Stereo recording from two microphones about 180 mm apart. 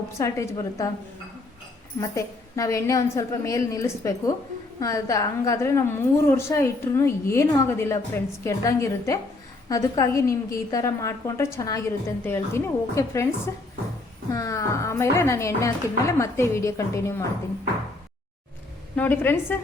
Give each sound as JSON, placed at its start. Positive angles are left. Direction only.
{"t": 0.1, "sound": "a woman's voice", "side_deg": 15}
{"t": 2.0, "sound": "a woman's voice", "side_deg": 15}
{"t": 18.9, "sound": "a woman's voice", "side_deg": 10}